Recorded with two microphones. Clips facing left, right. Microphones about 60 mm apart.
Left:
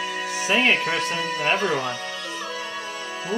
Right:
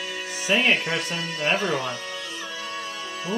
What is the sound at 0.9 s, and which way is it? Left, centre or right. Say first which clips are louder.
Speech: left 3 dB; centre.